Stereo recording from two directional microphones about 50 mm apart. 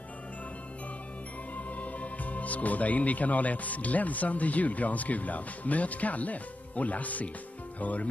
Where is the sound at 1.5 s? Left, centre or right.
Left.